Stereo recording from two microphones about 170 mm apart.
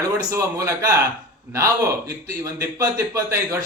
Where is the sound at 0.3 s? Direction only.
15° right (ahead or behind).